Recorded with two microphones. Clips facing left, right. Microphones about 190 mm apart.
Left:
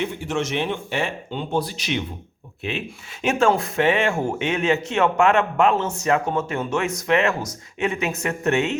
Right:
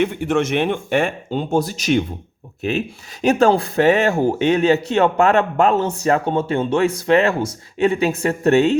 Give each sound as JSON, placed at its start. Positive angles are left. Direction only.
{"t": 0.0, "sound": "speech", "side_deg": -60}